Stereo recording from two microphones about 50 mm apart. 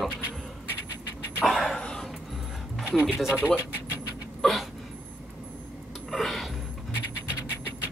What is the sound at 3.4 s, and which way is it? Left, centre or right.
Speech, left.